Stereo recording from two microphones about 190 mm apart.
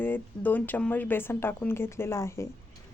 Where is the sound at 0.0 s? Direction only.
10° left (ahead or behind).